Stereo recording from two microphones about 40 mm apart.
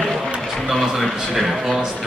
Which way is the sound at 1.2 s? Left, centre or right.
Centre.